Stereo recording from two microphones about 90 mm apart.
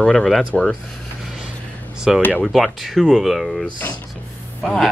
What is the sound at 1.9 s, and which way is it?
Speech, 5° right (ahead or behind).